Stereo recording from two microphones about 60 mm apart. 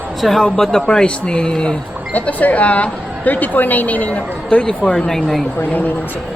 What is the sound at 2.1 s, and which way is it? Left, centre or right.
A woman's voice, left.